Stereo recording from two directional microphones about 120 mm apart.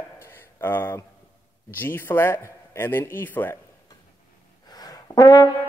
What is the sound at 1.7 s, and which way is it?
A man's voice, 15° left (ahead or behind).